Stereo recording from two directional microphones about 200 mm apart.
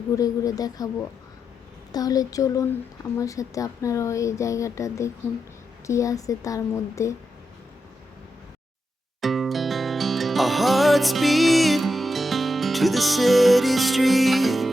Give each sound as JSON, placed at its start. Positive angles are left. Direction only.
{"t": 0.2, "sound": "speech", "side_deg": 20}
{"t": 1.9, "sound": "speech", "side_deg": 20}
{"t": 9.2, "sound": "music", "side_deg": 0}